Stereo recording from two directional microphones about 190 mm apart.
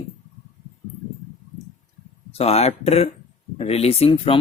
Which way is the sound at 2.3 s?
35° left (ahead or behind).